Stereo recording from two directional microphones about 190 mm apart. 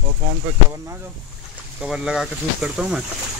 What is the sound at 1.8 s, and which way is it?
Speech, 5° right (ahead or behind).